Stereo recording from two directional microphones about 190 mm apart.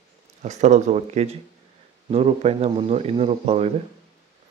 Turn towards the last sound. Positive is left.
turn(degrees=-35)  # may be behind; listen again after turning